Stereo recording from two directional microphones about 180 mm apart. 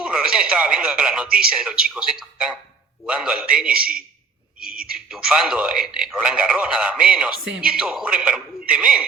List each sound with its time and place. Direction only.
0.0 s a man's voice: 5° right (ahead or behind)
4.6 s speech: 55° right (ahead or behind)
4.9 s a man's voice: 5° right (ahead or behind)